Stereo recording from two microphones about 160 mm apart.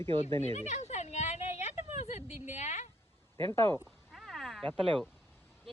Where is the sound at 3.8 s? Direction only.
Centre (ahead or behind).